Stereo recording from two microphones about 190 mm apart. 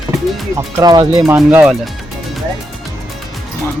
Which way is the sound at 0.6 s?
20° right (ahead or behind).